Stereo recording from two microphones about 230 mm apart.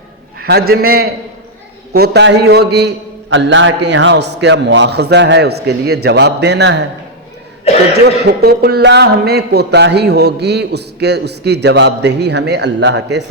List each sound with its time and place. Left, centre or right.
0.4 s a man's voice: right
7.7 s cough: left
8.0 s a man's voice: right